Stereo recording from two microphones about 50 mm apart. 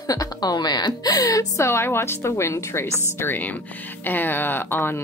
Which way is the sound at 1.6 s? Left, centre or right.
Left.